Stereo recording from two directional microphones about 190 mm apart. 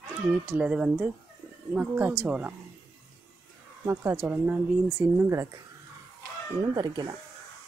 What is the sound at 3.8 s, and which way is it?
Speech, 15° right (ahead or behind).